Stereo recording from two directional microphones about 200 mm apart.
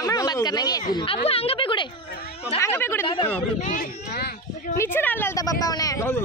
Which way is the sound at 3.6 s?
40° left (ahead or behind).